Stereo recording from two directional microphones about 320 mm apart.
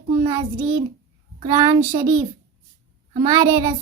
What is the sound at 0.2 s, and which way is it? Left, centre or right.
A child's voice, centre.